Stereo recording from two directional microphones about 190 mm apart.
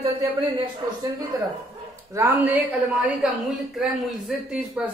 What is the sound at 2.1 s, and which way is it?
Speech, 10° right (ahead or behind).